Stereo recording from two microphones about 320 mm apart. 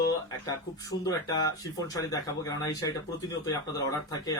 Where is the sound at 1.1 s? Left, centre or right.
Centre.